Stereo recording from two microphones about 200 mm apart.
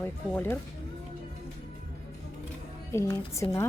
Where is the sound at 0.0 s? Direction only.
10° left (ahead or behind).